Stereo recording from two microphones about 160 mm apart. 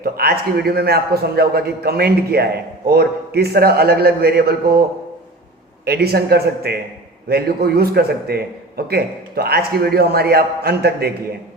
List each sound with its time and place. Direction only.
0.0 s a man's voice: 75° right (ahead or behind)
5.8 s a man's voice: 80° right